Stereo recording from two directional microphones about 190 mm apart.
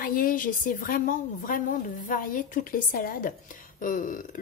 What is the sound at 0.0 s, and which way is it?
Speech, 45° left (ahead or behind).